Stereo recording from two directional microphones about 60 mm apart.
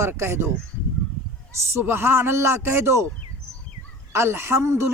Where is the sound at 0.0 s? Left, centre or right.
Right.